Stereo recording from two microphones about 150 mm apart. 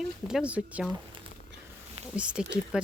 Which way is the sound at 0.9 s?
35° right (ahead or behind).